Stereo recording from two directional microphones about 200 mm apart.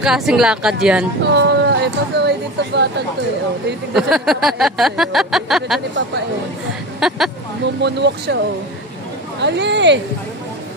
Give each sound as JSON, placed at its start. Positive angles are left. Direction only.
{"t": 0.0, "sound": "a sound", "side_deg": -5}
{"t": 1.2, "sound": "speech", "side_deg": -60}
{"t": 3.9, "sound": "a sound", "side_deg": 0}
{"t": 7.0, "sound": "speech", "side_deg": 0}
{"t": 7.6, "sound": "speech", "side_deg": -60}
{"t": 9.4, "sound": "speech", "side_deg": -60}